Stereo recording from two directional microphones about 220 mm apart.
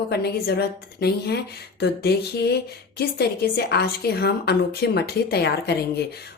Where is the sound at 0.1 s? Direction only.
45° left (ahead or behind).